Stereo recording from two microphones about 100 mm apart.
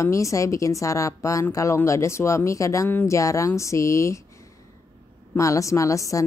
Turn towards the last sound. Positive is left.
turn(degrees=35)  # may be behind; listen again after turning